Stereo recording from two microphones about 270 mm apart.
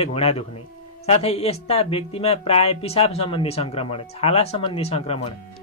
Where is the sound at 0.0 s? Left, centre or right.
Left.